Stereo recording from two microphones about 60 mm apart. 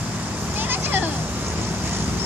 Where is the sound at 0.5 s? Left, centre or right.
Right.